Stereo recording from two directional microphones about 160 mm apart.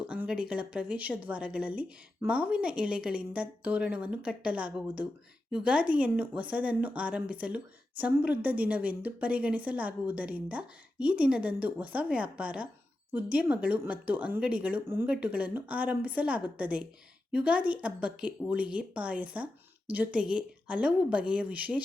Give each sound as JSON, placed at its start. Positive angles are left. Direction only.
{"t": 0.1, "sound": "speech", "side_deg": -5}